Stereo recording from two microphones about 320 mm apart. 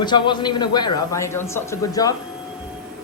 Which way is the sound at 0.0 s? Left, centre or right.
Centre.